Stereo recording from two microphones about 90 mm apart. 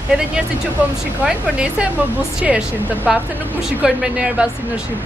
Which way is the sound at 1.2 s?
10° right (ahead or behind).